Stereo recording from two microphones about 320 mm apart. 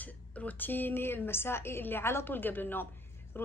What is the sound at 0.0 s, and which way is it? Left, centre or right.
A woman's voice, centre.